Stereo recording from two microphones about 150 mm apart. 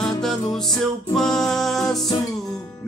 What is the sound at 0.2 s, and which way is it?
Music, centre (ahead or behind).